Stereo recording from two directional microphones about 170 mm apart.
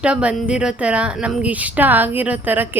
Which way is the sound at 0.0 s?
5° right (ahead or behind).